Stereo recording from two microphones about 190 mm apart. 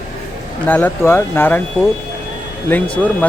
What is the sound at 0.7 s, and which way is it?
Speech, 10° left (ahead or behind).